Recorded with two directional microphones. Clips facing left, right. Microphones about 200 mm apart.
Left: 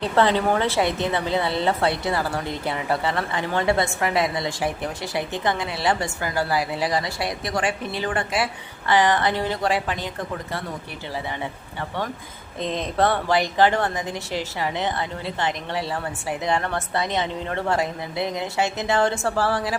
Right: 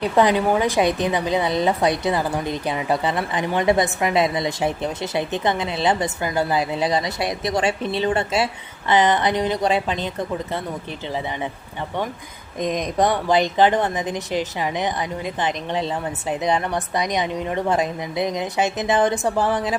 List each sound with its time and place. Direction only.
0.0 s a woman's voice: 15° right (ahead or behind)
12.5 s a woman's voice: 15° right (ahead or behind)